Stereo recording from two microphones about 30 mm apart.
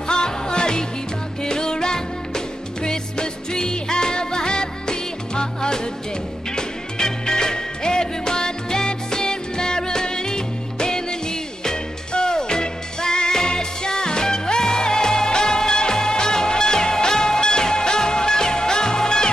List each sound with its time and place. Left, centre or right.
0.1 s music: left